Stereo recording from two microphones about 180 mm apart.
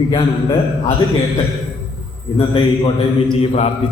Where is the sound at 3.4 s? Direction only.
35° left (ahead or behind).